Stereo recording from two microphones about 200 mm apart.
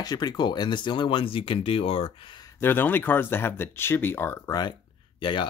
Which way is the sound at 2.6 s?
10° left (ahead or behind).